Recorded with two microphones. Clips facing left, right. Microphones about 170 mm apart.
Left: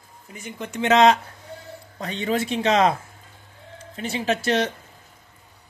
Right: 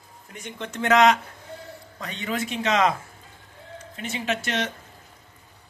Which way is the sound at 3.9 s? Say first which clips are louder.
Left 4 dB; 35° left (ahead or behind).